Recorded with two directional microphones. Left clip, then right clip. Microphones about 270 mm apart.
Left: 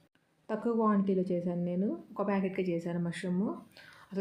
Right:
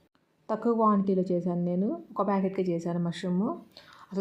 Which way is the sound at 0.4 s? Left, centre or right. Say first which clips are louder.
Right 5 dB; centre.